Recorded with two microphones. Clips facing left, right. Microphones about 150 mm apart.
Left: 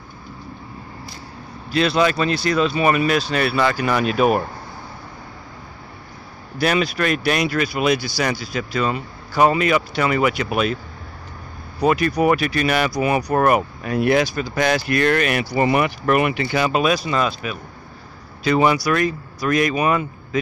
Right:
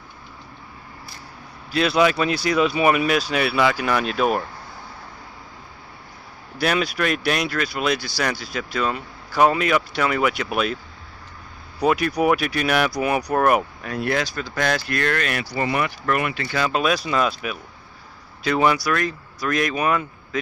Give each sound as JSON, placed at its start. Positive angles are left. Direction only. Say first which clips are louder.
{"t": 1.7, "sound": "speech", "louder": "left 1 dB", "side_deg": -5}
{"t": 6.6, "sound": "speech", "louder": "left 2 dB", "side_deg": 0}
{"t": 11.8, "sound": "speech", "louder": "left 2 dB", "side_deg": -5}